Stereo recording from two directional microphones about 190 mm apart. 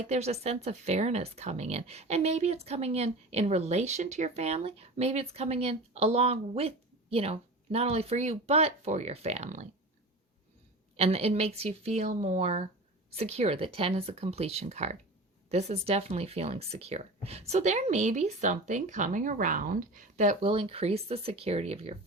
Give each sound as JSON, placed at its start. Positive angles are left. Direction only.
{"t": 0.1, "sound": "speech", "side_deg": -35}
{"t": 10.9, "sound": "speech", "side_deg": -35}